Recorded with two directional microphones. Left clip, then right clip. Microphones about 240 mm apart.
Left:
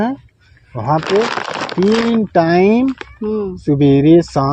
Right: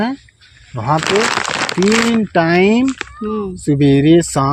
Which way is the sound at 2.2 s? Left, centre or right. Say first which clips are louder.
Left 1 dB; right.